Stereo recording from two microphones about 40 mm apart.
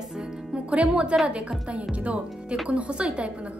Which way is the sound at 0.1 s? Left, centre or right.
Centre.